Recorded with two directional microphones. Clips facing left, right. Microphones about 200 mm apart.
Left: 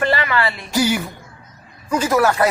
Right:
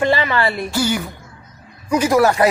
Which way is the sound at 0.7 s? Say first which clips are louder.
Left 1 dB; 10° left (ahead or behind).